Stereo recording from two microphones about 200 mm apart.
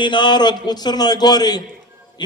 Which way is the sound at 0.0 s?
20° left (ahead or behind).